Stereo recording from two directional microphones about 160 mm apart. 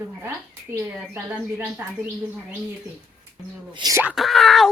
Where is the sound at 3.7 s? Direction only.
25° right (ahead or behind).